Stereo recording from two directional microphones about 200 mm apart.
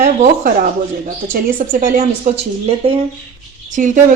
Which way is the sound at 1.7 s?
40° right (ahead or behind).